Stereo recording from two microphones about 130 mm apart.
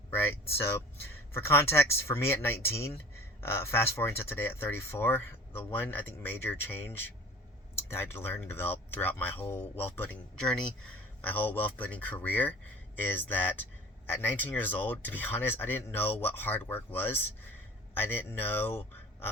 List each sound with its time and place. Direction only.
0.1 s speech: 15° left (ahead or behind)